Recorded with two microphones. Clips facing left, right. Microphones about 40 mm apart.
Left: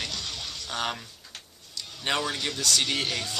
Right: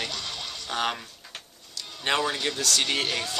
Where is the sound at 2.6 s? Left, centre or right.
Centre.